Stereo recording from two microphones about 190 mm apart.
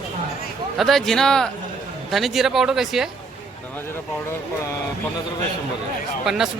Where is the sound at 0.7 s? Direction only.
Centre (ahead or behind).